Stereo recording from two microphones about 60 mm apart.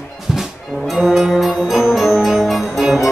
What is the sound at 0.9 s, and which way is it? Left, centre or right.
Music, centre.